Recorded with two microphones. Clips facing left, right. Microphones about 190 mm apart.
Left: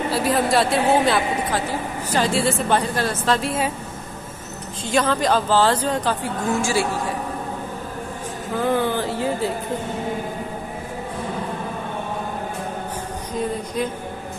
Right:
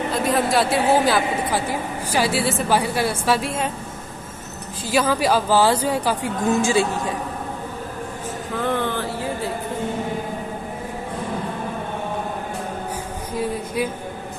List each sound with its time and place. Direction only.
0.1 s a man's voice: centre (ahead or behind)
4.8 s a woman's voice: 5° right (ahead or behind)
6.5 s speech: 20° right (ahead or behind)
8.6 s speech: 5° left (ahead or behind)